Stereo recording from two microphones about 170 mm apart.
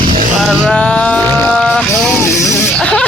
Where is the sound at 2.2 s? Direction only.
10° left (ahead or behind).